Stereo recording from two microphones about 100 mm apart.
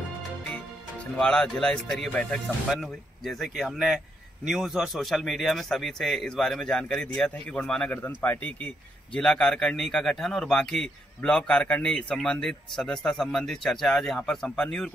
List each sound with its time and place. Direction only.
1.1 s a man's voice: 5° left (ahead or behind)
7.9 s a man's voice: 15° left (ahead or behind)